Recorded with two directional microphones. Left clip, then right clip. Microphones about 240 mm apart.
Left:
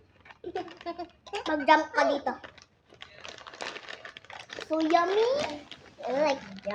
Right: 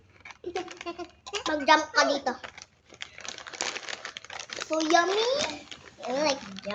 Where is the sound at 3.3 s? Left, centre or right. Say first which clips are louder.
Right 5 dB; right.